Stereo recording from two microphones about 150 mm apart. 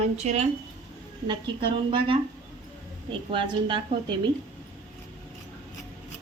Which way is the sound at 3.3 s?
35° right (ahead or behind).